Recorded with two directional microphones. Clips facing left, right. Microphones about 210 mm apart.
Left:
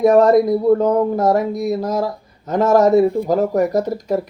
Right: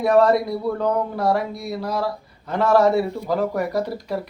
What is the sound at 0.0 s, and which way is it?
Speech, 45° left (ahead or behind).